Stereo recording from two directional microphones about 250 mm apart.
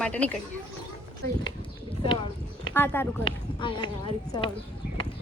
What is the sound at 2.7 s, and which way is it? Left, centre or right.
Speech, centre.